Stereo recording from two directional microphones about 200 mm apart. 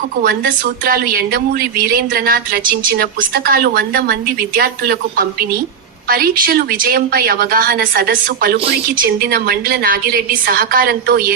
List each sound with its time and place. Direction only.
0.2 s a woman's voice: 45° right (ahead or behind)